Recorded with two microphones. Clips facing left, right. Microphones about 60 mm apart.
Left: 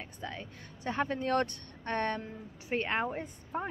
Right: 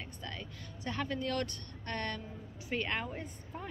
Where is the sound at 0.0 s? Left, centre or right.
Left.